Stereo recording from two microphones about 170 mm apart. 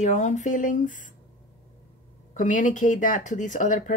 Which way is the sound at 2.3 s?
50° left (ahead or behind).